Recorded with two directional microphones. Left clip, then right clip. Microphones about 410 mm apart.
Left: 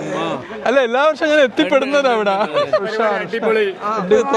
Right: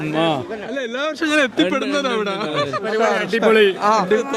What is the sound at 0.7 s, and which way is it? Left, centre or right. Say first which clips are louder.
Speech: left 12 dB; centre.